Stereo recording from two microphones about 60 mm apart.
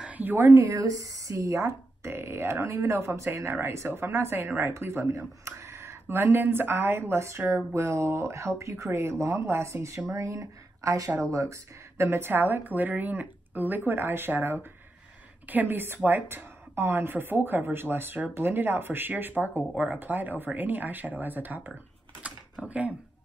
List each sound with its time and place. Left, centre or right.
0.1 s a sound: right
0.6 s speech: right
16.7 s speech: right
22.2 s typing: right